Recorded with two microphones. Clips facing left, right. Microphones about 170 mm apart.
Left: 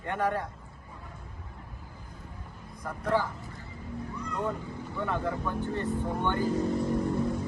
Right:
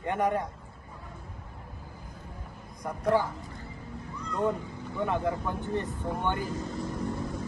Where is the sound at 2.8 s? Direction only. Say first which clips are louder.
Right 3 dB; 15° right (ahead or behind).